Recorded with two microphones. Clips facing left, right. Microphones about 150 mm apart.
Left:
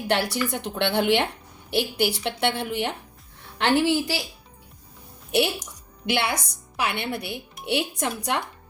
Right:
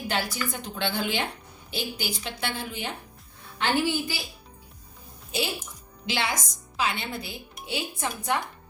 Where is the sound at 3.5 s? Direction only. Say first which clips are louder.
Left 5 dB; 80° left.